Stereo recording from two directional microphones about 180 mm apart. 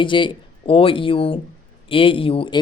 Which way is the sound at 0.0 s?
25° left (ahead or behind).